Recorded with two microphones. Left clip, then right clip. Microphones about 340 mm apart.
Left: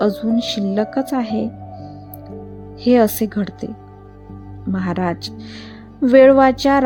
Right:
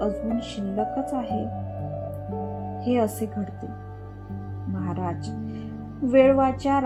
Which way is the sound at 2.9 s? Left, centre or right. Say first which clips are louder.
Left 10 dB; left.